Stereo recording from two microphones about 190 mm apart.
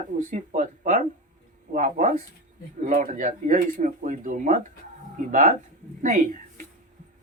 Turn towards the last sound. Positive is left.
turn(degrees=-40)  # may be behind; listen again after turning